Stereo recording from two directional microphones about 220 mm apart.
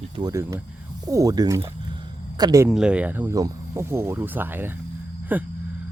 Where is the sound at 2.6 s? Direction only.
5° right (ahead or behind).